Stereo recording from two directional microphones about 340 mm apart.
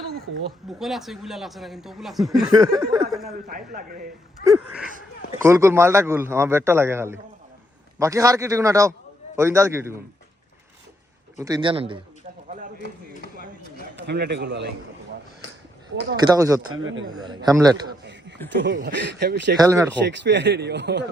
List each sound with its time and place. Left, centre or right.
0.7 s speech: centre
2.5 s a man's voice: centre
3.4 s a man's voice: right
4.4 s a sound: centre
5.4 s a man's voice: centre
11.4 s a man's voice: centre
13.9 s a man's voice: right
16.1 s a man's voice: centre
16.8 s speech: right
17.1 s a man's voice: centre
18.0 s a sound: right
18.5 s speech: right
19.5 s a man's voice: centre
20.1 s speech: right